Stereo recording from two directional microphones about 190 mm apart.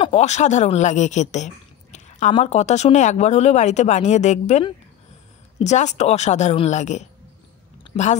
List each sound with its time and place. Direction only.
0.0 s speech: 35° left (ahead or behind)